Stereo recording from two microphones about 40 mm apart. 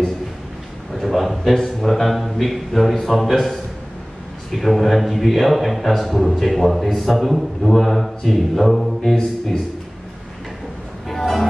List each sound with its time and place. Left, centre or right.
0.9 s a man's voice: centre
4.5 s a man's voice: centre
8.7 s a capella: centre
9.1 s speech: centre
11.1 s music: centre